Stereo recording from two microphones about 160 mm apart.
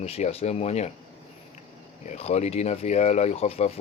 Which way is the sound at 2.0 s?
40° left (ahead or behind).